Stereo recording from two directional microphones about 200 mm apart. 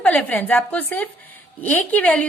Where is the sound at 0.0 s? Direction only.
5° left (ahead or behind).